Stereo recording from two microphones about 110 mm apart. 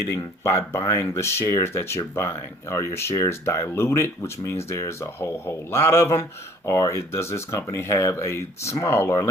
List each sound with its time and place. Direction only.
0.4 s speech: 25° left (ahead or behind)